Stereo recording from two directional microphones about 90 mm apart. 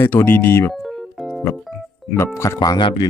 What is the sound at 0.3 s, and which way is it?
Speech, 25° left (ahead or behind).